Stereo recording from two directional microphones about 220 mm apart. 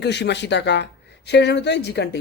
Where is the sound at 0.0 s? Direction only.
50° left (ahead or behind).